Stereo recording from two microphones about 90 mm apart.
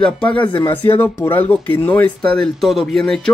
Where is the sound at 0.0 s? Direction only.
15° left (ahead or behind).